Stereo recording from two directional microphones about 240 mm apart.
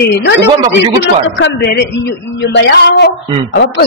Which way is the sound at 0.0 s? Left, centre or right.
Left.